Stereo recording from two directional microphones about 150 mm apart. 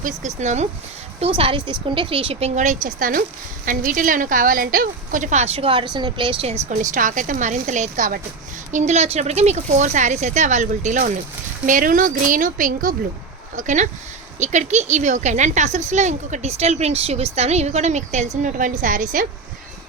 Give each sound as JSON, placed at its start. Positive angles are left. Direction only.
{"t": 0.0, "sound": "speech", "side_deg": -55}
{"t": 1.4, "sound": "a woman's voice", "side_deg": -35}